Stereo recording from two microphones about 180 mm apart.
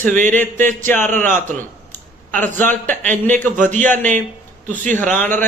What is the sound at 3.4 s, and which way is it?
Speech, 45° right (ahead or behind).